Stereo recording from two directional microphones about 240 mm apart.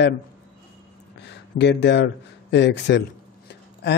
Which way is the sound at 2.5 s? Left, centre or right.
Left.